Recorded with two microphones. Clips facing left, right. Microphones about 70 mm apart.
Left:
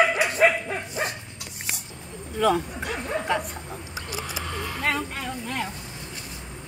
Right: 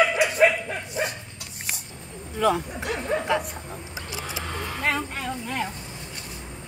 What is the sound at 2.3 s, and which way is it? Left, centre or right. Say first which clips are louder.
Bow-wow: left 1 dB; centre.